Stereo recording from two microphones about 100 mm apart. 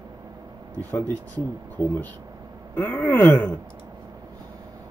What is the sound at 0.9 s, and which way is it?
Speech, 15° left (ahead or behind).